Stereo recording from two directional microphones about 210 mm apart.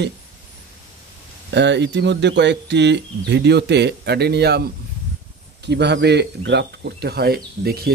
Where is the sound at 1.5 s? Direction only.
55° right (ahead or behind).